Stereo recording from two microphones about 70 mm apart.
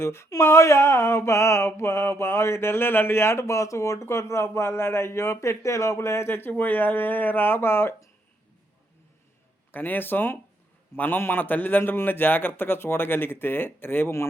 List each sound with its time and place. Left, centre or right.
0.0 s mantra: left
6.5 s speech: left
9.7 s speech: left
10.9 s mantra: left